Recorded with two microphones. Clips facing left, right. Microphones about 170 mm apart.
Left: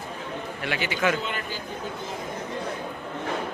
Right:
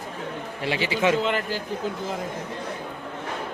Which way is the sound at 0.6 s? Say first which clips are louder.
Right 3 dB; 30° right (ahead or behind).